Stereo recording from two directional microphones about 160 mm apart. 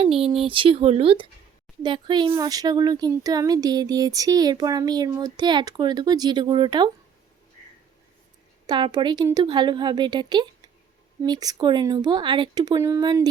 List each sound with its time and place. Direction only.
0.0 s speech: 35° right (ahead or behind)
8.6 s speech: 30° right (ahead or behind)